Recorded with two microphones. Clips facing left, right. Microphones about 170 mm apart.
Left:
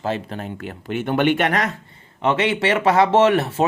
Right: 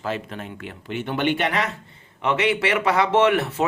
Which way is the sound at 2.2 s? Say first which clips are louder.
Left 2 dB; 30° left (ahead or behind).